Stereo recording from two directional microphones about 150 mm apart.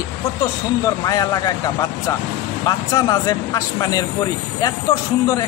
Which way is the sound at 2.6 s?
25° left (ahead or behind).